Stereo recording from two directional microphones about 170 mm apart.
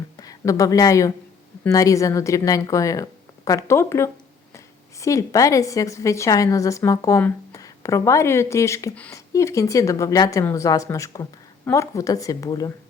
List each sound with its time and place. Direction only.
0.2 s a woman's voice: 20° left (ahead or behind)